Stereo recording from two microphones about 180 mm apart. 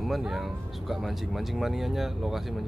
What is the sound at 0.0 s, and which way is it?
Speech, centre (ahead or behind).